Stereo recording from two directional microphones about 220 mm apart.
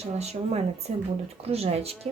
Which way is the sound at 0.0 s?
30° right (ahead or behind).